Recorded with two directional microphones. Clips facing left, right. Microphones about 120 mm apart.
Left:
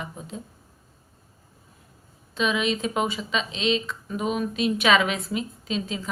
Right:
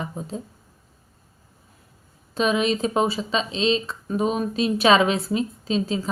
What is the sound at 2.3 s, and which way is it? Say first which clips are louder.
Speech: right 3 dB; 40° right (ahead or behind).